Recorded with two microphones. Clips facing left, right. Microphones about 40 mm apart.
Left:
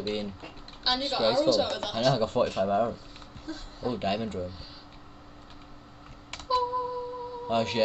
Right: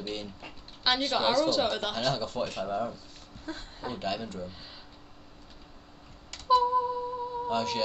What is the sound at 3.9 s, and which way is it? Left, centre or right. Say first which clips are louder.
Speech: left 3 dB; left.